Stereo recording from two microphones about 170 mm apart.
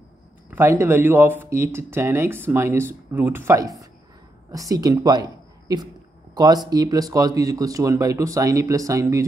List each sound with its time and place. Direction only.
0.5 s speech: 15° right (ahead or behind)